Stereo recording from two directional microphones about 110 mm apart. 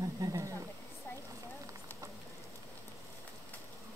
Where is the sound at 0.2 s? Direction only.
30° right (ahead or behind).